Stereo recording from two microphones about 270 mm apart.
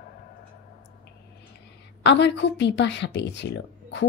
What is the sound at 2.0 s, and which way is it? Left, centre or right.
A woman's voice, left.